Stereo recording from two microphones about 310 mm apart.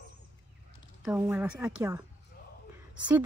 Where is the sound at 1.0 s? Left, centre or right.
Centre.